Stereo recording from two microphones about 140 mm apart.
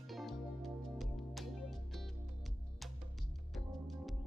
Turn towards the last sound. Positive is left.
turn(degrees=0)  # may be behind; listen again after turning